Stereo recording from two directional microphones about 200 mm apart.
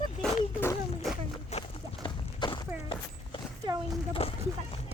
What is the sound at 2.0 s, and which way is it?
Walk, 25° left (ahead or behind).